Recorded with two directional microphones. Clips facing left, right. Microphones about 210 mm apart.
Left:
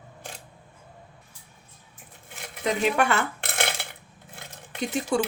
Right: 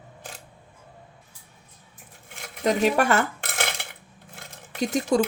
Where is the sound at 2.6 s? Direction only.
40° right (ahead or behind).